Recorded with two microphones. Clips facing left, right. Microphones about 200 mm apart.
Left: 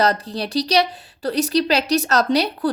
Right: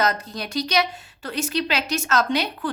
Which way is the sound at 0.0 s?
35° left (ahead or behind).